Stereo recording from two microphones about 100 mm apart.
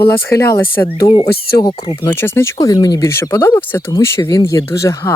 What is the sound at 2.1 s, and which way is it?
Speech, 25° left (ahead or behind).